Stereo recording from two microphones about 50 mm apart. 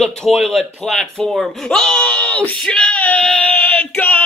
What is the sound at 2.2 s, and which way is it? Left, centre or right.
Speech, left.